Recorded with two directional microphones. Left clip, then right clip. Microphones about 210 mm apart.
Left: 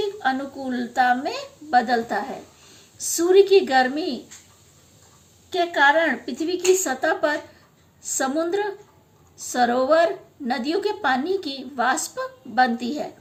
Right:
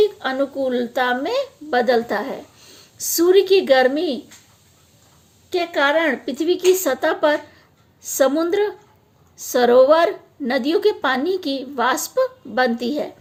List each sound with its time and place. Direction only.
0.2 s a woman's voice: 50° right (ahead or behind)
5.5 s a woman's voice: 50° right (ahead or behind)